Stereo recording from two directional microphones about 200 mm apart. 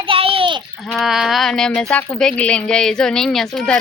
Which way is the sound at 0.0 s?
25° right (ahead or behind).